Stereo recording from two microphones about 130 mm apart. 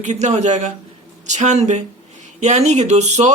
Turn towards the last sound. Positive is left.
turn(degrees=-60)  # may be behind; listen again after turning